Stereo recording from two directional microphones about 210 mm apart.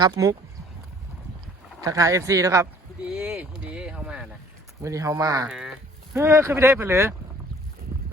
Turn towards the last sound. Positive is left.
turn(degrees=-10)  # may be behind; listen again after turning